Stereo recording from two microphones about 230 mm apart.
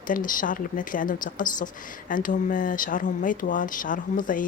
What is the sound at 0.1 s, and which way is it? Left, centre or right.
A woman's voice, left.